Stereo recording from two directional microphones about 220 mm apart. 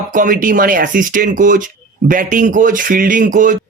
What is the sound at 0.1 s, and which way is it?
Speech, 35° right (ahead or behind).